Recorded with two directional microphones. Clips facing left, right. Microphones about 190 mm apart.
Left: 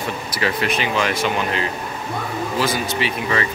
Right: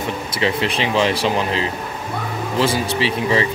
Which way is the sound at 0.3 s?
25° right (ahead or behind).